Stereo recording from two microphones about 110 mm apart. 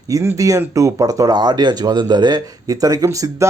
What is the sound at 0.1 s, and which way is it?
Speech, 25° right (ahead or behind).